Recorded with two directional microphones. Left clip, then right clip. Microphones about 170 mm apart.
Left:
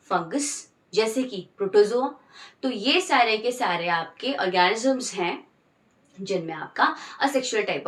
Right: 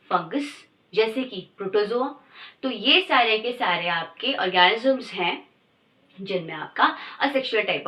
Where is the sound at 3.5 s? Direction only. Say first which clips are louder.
Right 1 dB; 25° left (ahead or behind).